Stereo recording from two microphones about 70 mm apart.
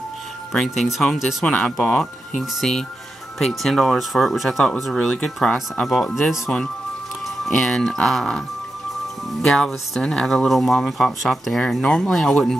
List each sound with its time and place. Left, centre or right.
0.5 s speech: centre
1.4 s speech: centre
2.5 s speech: centre